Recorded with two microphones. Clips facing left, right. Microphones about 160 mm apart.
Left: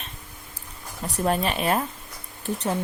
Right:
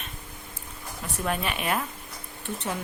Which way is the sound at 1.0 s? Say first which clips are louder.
Left 5 dB; 35° left (ahead or behind).